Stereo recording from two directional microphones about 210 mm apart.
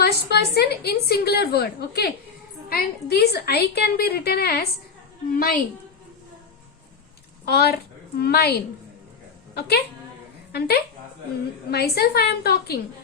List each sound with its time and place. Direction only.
0.0 s a woman's voice: 50° left (ahead or behind)
7.4 s a woman's voice: 50° left (ahead or behind)